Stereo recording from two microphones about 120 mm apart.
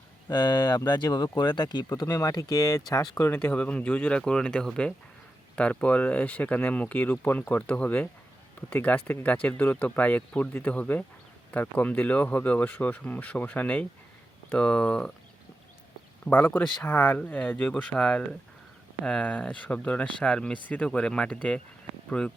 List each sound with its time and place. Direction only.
0.3 s speech: 35° left (ahead or behind)
2.0 s speech: 30° left (ahead or behind); by 15.1 s 10° left (ahead or behind)
16.2 s speech: 15° left (ahead or behind)